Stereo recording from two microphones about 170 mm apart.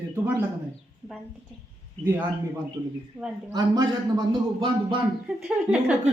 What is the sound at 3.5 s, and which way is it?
A man's voice, 20° right (ahead or behind).